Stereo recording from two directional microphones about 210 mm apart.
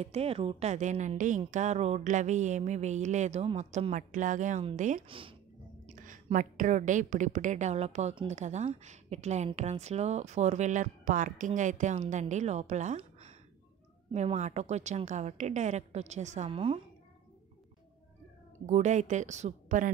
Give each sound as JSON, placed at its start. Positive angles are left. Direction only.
{"t": 0.0, "sound": "a woman's voice", "side_deg": -30}
{"t": 5.9, "sound": "a woman's voice", "side_deg": -40}
{"t": 18.7, "sound": "a woman's voice", "side_deg": -35}